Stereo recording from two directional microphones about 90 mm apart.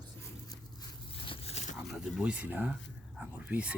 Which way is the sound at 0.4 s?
45° left (ahead or behind).